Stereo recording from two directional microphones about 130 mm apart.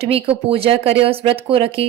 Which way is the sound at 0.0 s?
50° right (ahead or behind).